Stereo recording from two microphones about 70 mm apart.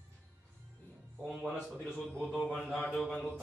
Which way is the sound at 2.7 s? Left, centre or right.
Centre.